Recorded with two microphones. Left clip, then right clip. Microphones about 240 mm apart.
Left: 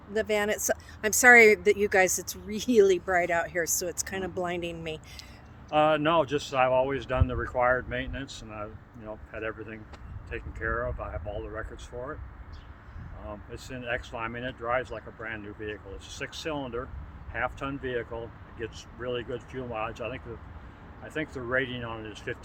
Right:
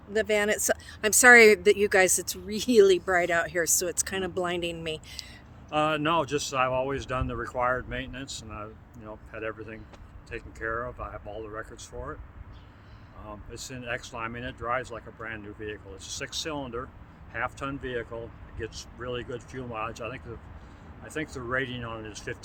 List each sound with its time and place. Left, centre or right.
0.1 s speech: centre
5.7 s speech: centre
13.2 s speech: centre
21.0 s speech: centre